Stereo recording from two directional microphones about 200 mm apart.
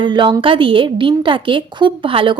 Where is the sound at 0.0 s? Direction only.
25° right (ahead or behind).